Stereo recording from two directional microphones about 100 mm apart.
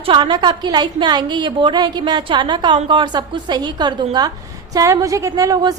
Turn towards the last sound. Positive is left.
turn(degrees=-40)  # may be behind; listen again after turning